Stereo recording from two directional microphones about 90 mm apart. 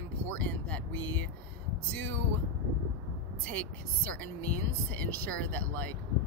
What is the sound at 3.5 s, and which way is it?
Speech, 15° left (ahead or behind).